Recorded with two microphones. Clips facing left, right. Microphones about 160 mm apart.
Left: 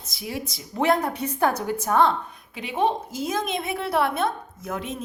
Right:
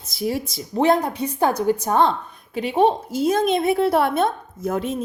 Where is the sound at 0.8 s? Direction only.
20° right (ahead or behind).